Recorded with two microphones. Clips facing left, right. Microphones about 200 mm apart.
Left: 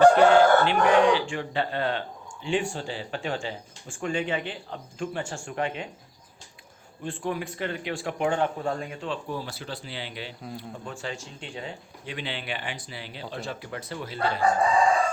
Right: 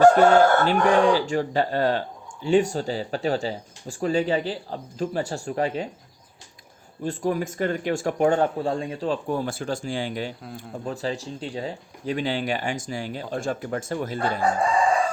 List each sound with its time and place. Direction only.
0.0 s speech: 40° right (ahead or behind)
7.0 s speech: 40° right (ahead or behind)
9.3 s speech: 50° right (ahead or behind)